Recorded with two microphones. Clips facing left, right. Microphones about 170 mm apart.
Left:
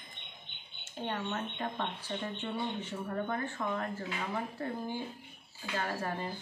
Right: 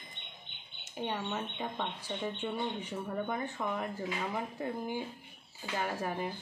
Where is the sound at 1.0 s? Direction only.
10° right (ahead or behind).